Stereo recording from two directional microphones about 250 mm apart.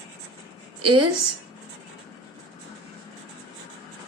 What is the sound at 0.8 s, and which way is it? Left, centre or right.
Speech, right.